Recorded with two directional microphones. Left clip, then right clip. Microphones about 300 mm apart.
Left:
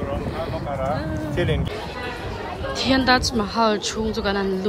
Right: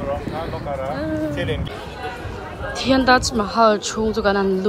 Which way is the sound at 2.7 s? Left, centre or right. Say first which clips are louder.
Right 3 dB; centre.